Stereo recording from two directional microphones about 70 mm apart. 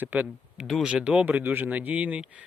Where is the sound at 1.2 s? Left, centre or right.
Right.